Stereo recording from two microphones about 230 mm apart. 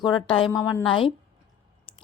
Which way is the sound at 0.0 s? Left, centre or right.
Left.